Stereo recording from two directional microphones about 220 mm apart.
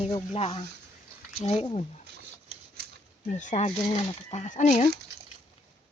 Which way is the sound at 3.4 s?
30° left (ahead or behind).